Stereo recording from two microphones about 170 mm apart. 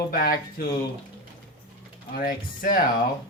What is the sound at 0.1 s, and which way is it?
Speech, 55° left (ahead or behind).